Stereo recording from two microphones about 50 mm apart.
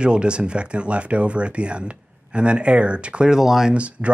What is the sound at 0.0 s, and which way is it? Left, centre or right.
Speech, centre.